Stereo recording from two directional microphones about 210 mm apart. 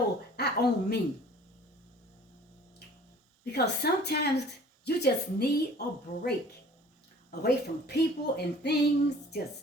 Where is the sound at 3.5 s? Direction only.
50° left (ahead or behind).